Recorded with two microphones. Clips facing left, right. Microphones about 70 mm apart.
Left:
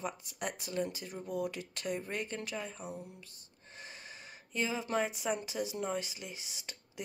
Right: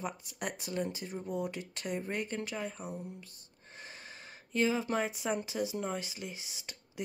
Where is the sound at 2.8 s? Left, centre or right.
Centre.